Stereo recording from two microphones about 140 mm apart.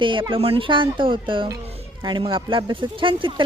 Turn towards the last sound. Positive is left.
turn(degrees=-40)  # may be behind; listen again after turning